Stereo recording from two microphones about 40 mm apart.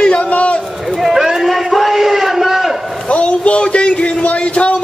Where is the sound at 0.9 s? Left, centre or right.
Centre.